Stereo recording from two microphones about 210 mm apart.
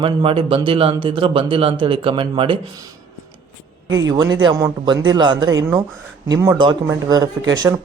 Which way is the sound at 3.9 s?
15° right (ahead or behind).